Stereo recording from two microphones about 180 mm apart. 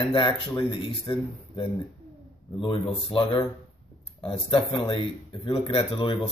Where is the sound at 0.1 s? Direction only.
25° left (ahead or behind).